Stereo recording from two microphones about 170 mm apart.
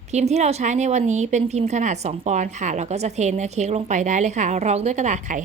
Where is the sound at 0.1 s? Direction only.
40° right (ahead or behind).